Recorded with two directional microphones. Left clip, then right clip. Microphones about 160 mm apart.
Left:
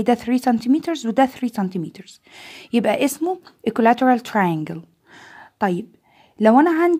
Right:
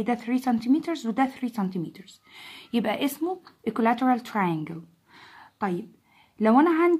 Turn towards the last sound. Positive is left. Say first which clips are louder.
# left 5 dB
turn(degrees=50)  # may be behind; listen again after turning